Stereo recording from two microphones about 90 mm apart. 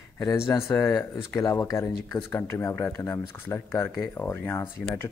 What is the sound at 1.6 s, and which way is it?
Speech, 30° left (ahead or behind).